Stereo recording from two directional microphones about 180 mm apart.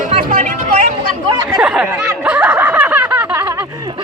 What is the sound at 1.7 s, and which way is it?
Snicker, 10° right (ahead or behind).